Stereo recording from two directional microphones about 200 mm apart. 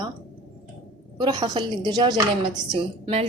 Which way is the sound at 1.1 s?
20° right (ahead or behind).